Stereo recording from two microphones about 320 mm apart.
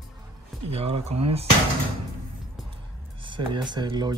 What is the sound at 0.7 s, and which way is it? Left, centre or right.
Speech, centre.